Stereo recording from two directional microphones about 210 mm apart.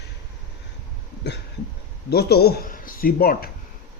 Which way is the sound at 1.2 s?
55° left (ahead or behind).